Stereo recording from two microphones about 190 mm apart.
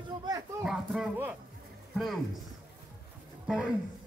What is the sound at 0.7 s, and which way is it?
Speech, 5° right (ahead or behind).